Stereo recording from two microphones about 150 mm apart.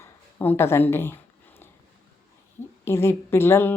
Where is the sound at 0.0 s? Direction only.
15° left (ahead or behind).